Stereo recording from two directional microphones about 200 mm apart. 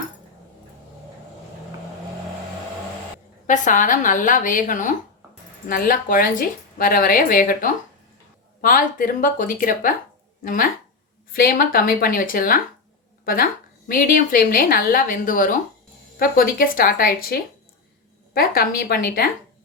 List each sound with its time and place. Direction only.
3.4 s a woman's voice: 40° left (ahead or behind)
18.3 s a woman's voice: 50° left (ahead or behind)